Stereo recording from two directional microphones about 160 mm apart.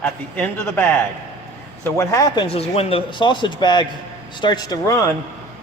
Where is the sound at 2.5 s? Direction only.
40° left (ahead or behind).